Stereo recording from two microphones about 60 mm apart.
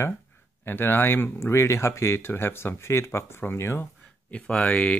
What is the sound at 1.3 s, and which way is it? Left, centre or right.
Speech, left.